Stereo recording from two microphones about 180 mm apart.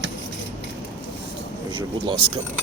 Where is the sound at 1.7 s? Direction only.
25° right (ahead or behind).